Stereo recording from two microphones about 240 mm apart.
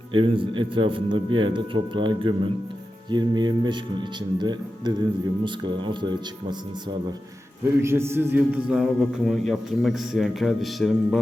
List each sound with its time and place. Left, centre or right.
0.1 s a man's voice: right
7.8 s a man's voice: centre